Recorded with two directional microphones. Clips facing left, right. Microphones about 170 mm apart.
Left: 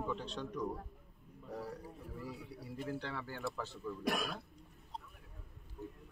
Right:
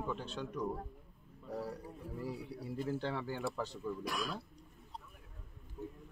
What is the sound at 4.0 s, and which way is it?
Speech, 60° left (ahead or behind).